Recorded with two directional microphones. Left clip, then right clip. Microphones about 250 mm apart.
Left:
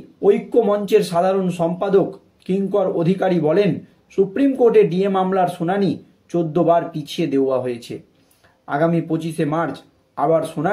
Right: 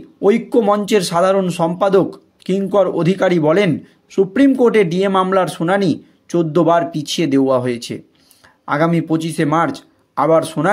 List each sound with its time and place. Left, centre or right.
0.2 s speech: right